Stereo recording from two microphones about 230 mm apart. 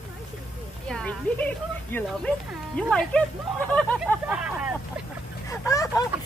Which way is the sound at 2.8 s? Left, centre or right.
Centre.